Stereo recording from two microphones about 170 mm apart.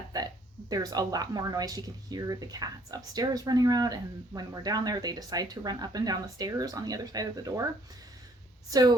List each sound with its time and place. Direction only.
0.1 s a sound: 20° right (ahead or behind)
0.7 s speech: 20° right (ahead or behind)
8.7 s speech: 25° right (ahead or behind)